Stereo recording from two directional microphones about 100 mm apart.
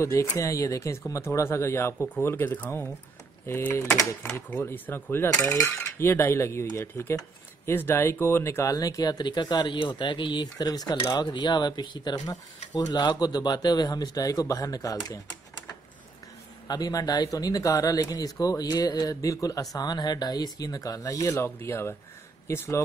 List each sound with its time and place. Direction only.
0.0 s speech: 30° left (ahead or behind)
5.4 s cutlery: 25° left (ahead or behind); by 11.0 s 40° left (ahead or behind)
11.1 s speech: 50° left (ahead or behind)
12.7 s cutlery: 45° left (ahead or behind)
16.6 s cutlery: 40° left (ahead or behind); by 21.9 s 25° left (ahead or behind)
22.5 s speech: 25° left (ahead or behind)